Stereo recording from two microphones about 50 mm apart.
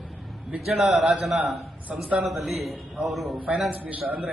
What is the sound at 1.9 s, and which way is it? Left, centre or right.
Speech, right.